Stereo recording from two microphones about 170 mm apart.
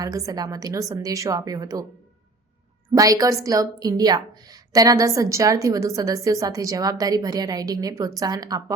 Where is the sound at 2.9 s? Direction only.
20° right (ahead or behind).